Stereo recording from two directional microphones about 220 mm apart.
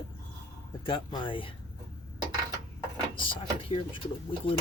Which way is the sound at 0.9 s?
20° left (ahead or behind).